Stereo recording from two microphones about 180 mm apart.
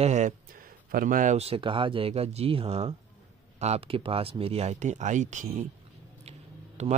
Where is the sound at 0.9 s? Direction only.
50° right (ahead or behind).